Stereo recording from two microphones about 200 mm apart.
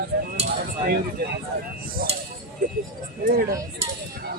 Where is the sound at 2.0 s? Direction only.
50° right (ahead or behind).